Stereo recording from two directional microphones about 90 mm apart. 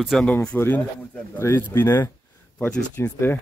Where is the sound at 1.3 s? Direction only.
30° left (ahead or behind).